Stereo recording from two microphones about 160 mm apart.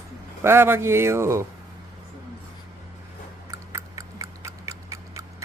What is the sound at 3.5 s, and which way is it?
Tick-tock, 20° right (ahead or behind).